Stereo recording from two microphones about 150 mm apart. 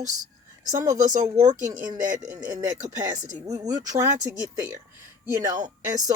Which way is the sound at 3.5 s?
25° right (ahead or behind).